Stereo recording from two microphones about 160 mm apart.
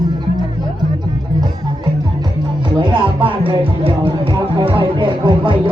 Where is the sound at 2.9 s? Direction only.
35° right (ahead or behind).